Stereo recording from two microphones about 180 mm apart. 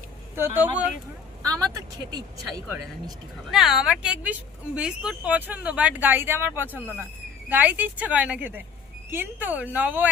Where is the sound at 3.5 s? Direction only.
Centre (ahead or behind).